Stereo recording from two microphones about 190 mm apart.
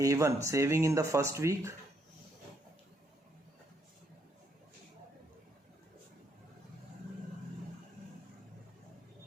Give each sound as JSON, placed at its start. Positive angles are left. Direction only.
{"t": 0.0, "sound": "speech", "side_deg": -15}